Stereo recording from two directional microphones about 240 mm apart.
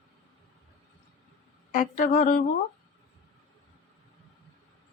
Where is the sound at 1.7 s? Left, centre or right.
Left.